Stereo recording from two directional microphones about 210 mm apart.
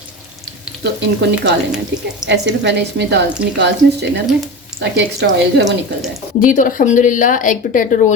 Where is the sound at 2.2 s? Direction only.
55° right (ahead or behind).